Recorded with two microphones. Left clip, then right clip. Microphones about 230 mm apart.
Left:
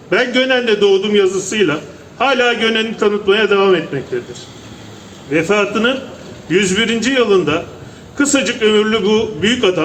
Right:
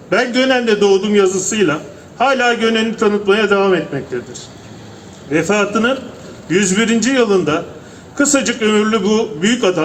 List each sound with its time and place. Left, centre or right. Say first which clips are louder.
0.1 s a man's voice: even; right
5.3 s a man's voice: left 1 dB; right